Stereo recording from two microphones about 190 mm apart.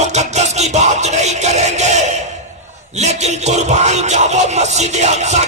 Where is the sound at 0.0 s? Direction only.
35° right (ahead or behind).